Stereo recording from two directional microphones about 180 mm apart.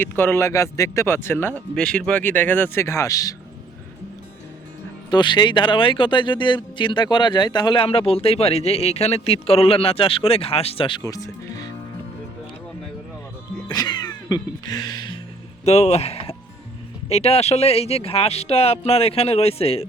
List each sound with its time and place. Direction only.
0.0 s speech: 10° left (ahead or behind)
5.1 s speech: 25° left (ahead or behind)
13.7 s music: 20° left (ahead or behind)
15.6 s speech: 35° left (ahead or behind)